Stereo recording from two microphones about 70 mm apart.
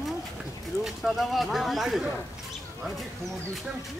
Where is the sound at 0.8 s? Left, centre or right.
Centre.